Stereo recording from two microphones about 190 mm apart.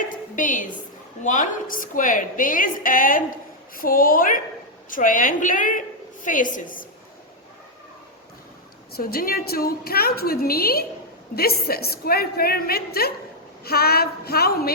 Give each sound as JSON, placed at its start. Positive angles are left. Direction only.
{"t": 0.1, "sound": "a sound", "side_deg": 45}
{"t": 1.2, "sound": "a woman's voice", "side_deg": 45}
{"t": 8.9, "sound": "a woman's voice", "side_deg": 55}